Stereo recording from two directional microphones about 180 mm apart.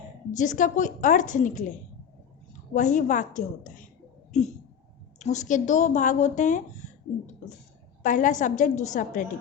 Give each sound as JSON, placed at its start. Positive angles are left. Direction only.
{"t": 0.3, "sound": "a woman's voice", "side_deg": 45}
{"t": 2.7, "sound": "a woman's voice", "side_deg": 45}
{"t": 4.3, "sound": "a sound", "side_deg": 40}
{"t": 5.2, "sound": "a woman's voice", "side_deg": 40}
{"t": 8.0, "sound": "a woman's voice", "side_deg": 45}